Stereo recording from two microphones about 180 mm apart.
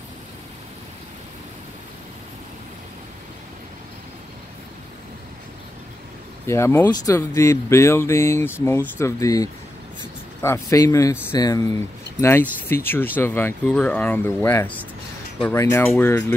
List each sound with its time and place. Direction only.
6.4 s speech: 15° left (ahead or behind)